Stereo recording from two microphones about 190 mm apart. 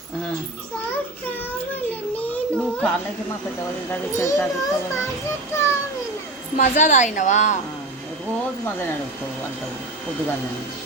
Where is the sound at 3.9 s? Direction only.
15° left (ahead or behind).